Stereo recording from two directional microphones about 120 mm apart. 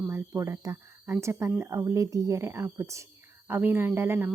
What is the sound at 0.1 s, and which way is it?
Speech, 25° right (ahead or behind).